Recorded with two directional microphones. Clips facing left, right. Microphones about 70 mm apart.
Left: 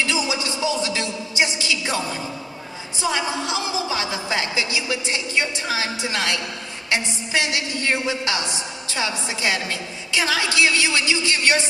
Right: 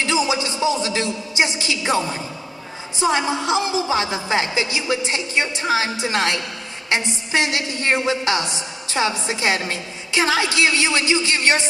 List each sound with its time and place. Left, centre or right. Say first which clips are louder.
0.0 s a woman's voice: right 3 dB; right